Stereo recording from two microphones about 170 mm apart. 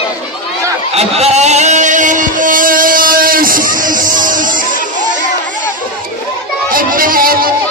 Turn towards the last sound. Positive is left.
turn(degrees=-60)  # may be behind; listen again after turning